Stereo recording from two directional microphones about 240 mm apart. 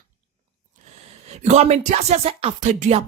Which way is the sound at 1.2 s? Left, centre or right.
Right.